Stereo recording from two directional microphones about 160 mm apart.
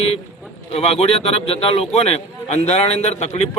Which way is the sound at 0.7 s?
40° left (ahead or behind).